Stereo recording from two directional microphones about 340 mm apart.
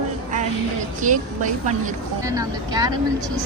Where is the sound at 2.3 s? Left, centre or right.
Centre.